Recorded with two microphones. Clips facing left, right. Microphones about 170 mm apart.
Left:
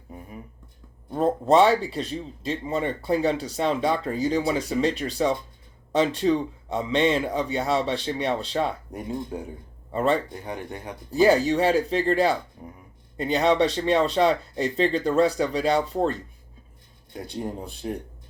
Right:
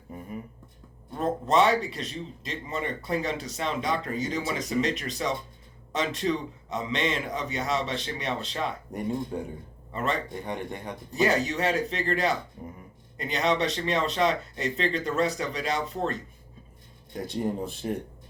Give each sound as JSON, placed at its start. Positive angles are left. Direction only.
{"t": 0.1, "sound": "a sound", "side_deg": 0}
{"t": 1.1, "sound": "a man's voice", "side_deg": 35}
{"t": 9.3, "sound": "speech", "side_deg": 5}
{"t": 9.9, "sound": "a man's voice", "side_deg": 35}
{"t": 10.4, "sound": "speech", "side_deg": 0}
{"t": 11.1, "sound": "a man's voice", "side_deg": 35}
{"t": 17.2, "sound": "speech", "side_deg": 0}